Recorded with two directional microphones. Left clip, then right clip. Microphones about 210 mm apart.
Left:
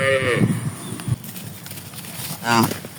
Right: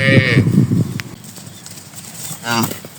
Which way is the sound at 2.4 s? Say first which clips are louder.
Left 1 dB; 50° right (ahead or behind).